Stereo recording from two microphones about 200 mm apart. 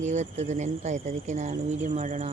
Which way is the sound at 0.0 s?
35° right (ahead or behind).